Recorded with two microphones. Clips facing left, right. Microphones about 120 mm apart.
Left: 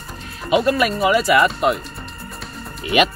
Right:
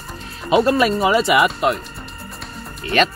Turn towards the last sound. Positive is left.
turn(degrees=10)  # may be behind; listen again after turning